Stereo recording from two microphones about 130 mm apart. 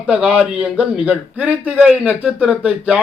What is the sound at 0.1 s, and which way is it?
Speech, 5° right (ahead or behind).